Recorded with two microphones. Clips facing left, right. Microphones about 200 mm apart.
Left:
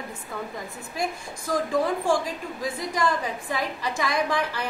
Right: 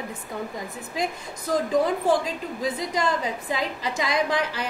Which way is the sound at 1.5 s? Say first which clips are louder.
Right 2 dB; 20° right (ahead or behind).